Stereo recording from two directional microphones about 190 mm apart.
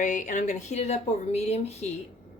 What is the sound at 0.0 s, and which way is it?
A woman's voice, 40° left (ahead or behind).